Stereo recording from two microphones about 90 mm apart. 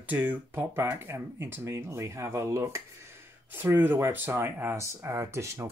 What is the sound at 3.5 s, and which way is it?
Speech, 25° right (ahead or behind).